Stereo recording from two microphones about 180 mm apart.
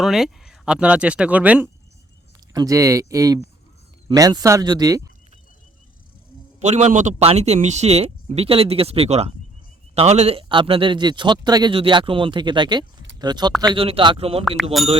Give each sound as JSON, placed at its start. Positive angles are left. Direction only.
{"t": 0.0, "sound": "speech", "side_deg": 0}
{"t": 2.5, "sound": "a man's voice", "side_deg": -20}
{"t": 6.6, "sound": "a man's voice", "side_deg": -40}
{"t": 14.4, "sound": "speech", "side_deg": 0}